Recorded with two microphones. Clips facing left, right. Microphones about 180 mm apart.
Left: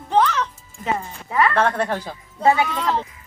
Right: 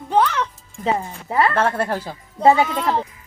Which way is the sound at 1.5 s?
5° right (ahead or behind).